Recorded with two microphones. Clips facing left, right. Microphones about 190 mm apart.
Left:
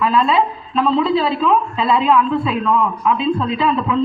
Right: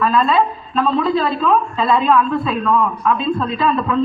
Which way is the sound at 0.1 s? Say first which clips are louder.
Even; 15° left (ahead or behind).